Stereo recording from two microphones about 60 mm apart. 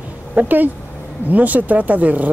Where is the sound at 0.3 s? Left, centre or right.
Right.